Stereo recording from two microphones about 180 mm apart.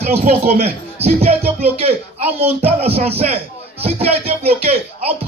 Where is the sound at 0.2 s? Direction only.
35° right (ahead or behind).